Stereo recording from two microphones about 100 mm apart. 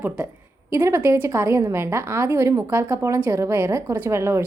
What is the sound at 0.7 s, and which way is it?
A woman's voice, 25° right (ahead or behind).